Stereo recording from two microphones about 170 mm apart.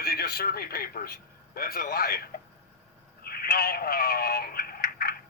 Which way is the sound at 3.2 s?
65° left (ahead or behind).